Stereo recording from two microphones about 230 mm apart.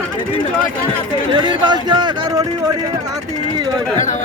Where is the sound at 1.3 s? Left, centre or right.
Centre.